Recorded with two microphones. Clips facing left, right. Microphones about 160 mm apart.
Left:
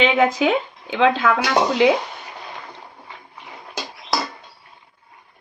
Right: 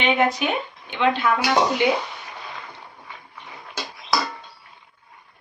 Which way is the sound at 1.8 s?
90° left.